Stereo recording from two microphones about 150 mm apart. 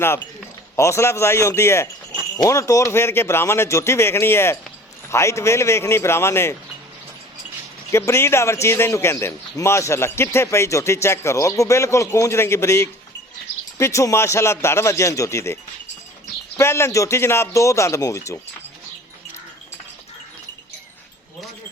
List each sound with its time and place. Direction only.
0.8 s a man's voice: 20° left (ahead or behind)
7.9 s speech: 20° left (ahead or behind)
16.6 s speech: 15° left (ahead or behind)